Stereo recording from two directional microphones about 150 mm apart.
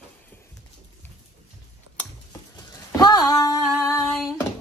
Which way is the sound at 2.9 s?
25° left (ahead or behind).